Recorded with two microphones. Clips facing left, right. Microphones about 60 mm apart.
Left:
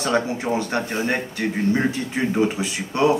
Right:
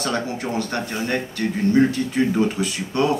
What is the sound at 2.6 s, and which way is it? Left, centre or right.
Speech, centre.